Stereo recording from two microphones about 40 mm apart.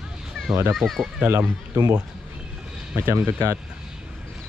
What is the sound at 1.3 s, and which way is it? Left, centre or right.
Speech, right.